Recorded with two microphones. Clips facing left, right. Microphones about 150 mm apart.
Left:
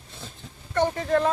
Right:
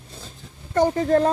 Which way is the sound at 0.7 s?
40° right (ahead or behind).